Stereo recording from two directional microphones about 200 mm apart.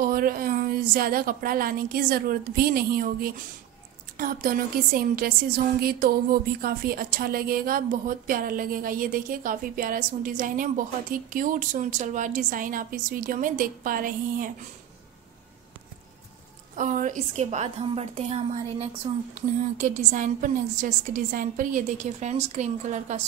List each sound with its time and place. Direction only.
0.0 s speech: 45° right (ahead or behind)
16.7 s a woman's voice: 40° right (ahead or behind)